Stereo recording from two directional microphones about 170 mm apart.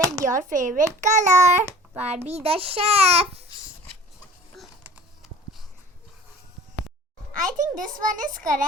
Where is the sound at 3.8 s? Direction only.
5° left (ahead or behind).